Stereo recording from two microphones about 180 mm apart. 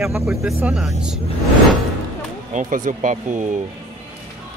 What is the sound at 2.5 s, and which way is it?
Speech, 45° right (ahead or behind).